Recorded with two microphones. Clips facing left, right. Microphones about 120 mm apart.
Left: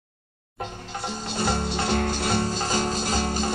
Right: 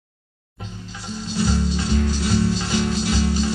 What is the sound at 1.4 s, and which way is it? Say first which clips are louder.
Music: right 3 dB; 55° left (ahead or behind).